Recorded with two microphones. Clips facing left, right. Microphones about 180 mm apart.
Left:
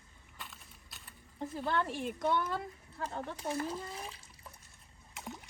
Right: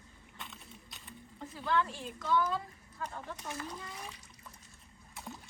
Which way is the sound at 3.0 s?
30° left (ahead or behind).